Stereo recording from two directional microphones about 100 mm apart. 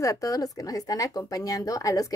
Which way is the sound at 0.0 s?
35° left (ahead or behind).